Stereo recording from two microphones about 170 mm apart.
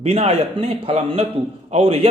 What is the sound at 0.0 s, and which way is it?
Speech, 40° right (ahead or behind).